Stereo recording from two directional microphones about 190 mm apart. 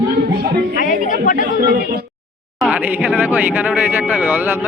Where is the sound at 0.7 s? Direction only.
45° left (ahead or behind).